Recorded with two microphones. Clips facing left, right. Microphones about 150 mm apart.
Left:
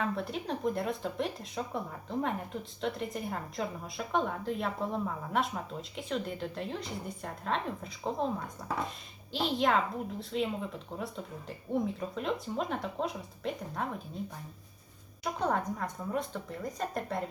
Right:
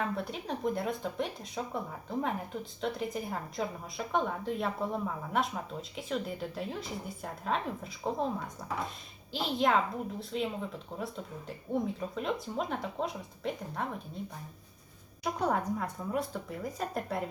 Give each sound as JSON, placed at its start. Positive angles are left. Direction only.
{"t": 0.0, "sound": "speech", "side_deg": 0}
{"t": 15.2, "sound": "speech", "side_deg": -10}